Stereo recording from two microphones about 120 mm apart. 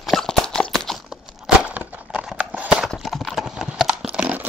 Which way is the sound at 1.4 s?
10° right (ahead or behind).